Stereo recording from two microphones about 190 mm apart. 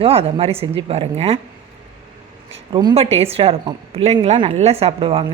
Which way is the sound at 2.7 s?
25° right (ahead or behind).